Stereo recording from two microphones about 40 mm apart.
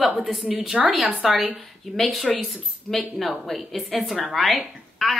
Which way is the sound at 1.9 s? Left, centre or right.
Right.